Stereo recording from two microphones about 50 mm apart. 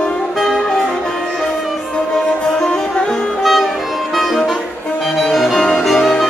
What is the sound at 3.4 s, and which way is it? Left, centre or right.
Music, centre.